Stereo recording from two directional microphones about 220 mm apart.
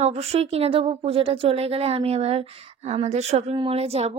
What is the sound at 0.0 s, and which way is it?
Speech, 30° right (ahead or behind).